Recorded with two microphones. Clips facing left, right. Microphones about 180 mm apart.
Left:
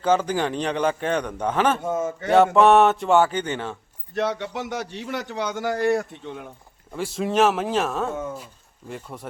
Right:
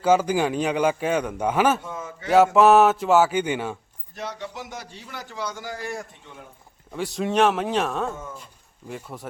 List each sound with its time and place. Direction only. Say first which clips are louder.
0.0 s a man's voice: right 2 dB; 10° right (ahead or behind)
1.8 s a man's voice: left 9 dB; 45° left (ahead or behind)
2.3 s speech: even; centre (ahead or behind)
4.1 s a man's voice: left 8 dB; 65° left (ahead or behind)
6.9 s speech: left 1 dB; centre (ahead or behind)